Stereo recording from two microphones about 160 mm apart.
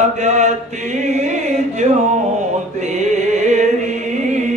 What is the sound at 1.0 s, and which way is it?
Music, 45° right (ahead or behind).